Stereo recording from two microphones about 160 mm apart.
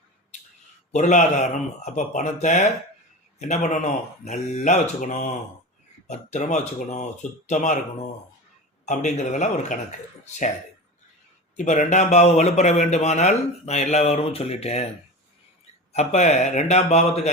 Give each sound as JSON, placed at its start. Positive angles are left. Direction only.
{"t": 0.3, "sound": "a sound", "side_deg": 45}
{"t": 0.9, "sound": "speech", "side_deg": 45}
{"t": 11.5, "sound": "speech", "side_deg": 50}
{"t": 15.9, "sound": "speech", "side_deg": 45}